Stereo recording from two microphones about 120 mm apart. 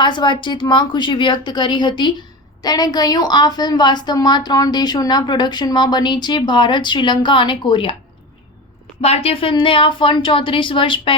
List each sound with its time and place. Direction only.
0.0 s a woman's voice: 40° left (ahead or behind)
9.0 s speech: 55° left (ahead or behind)